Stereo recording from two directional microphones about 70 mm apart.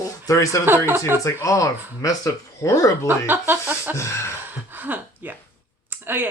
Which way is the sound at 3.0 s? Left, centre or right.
Right.